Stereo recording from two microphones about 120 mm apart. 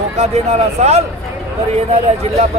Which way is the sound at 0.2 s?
65° right (ahead or behind).